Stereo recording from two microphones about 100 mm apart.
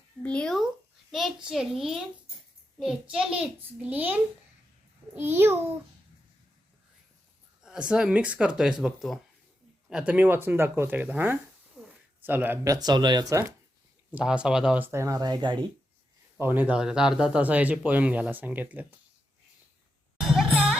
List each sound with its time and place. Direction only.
0.2 s speech: 10° left (ahead or behind)
1.1 s a child's voice: 5° right (ahead or behind); by 5.5 s 25° right (ahead or behind)
7.6 s speech: 10° right (ahead or behind)
11.8 s a sound: centre (ahead or behind)
12.2 s speech: 20° right (ahead or behind)
12.6 s speech: 40° right (ahead or behind)
14.1 s speech: 15° right (ahead or behind)
14.8 s speech: 25° right (ahead or behind)
15.2 s speech: 45° right (ahead or behind)
16.4 s speech: 20° right (ahead or behind)
16.7 s speech: 5° right (ahead or behind)
20.1 s music: centre (ahead or behind)